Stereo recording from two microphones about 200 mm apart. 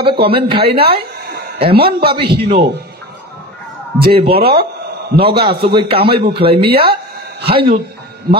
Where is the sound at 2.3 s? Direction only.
55° right (ahead or behind).